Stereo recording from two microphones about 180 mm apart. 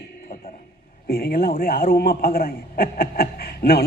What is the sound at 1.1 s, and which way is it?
A man's voice, 55° left (ahead or behind).